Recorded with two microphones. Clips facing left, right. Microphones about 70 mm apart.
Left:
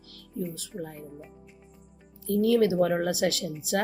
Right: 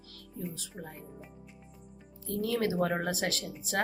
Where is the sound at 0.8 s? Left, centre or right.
Centre.